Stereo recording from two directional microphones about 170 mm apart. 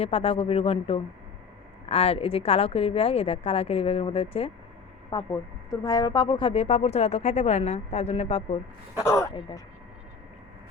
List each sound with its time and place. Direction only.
0.0 s speech: 35° left (ahead or behind)
5.1 s speech: 25° left (ahead or behind)
9.0 s speech: 15° left (ahead or behind)